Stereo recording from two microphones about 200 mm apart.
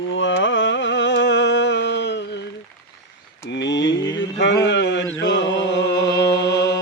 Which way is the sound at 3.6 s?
65° left (ahead or behind).